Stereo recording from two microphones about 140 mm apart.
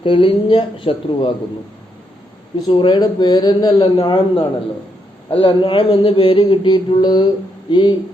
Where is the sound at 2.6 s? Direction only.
35° left (ahead or behind).